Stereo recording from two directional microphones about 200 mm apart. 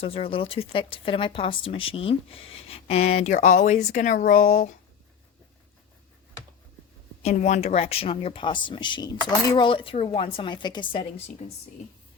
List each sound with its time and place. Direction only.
0.0 s speech: 30° left (ahead or behind)
7.2 s speech: 35° left (ahead or behind)